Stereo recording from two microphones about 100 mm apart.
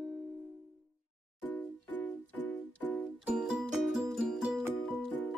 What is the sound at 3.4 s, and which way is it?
Music, 5° right (ahead or behind).